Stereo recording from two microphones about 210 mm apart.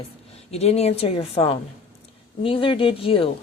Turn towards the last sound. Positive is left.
turn(degrees=25)  # may be behind; listen again after turning